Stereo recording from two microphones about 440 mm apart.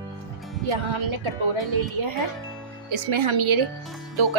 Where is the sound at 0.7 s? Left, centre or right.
Right.